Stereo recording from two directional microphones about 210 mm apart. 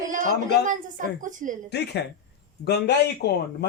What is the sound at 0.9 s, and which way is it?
Speech, 40° right (ahead or behind).